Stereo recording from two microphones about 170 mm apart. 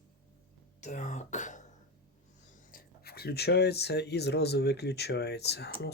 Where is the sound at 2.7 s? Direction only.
60° left (ahead or behind).